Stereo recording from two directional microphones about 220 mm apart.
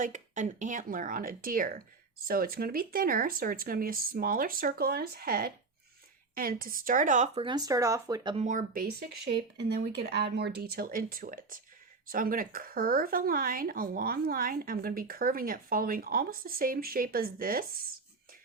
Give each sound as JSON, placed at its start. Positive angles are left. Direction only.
{"t": 0.0, "sound": "speech", "side_deg": -35}
{"t": 7.4, "sound": "speech", "side_deg": -15}
{"t": 8.4, "sound": "speech", "side_deg": -40}